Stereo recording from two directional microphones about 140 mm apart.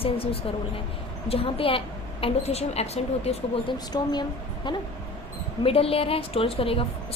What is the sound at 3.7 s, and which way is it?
A woman's voice, 30° left (ahead or behind).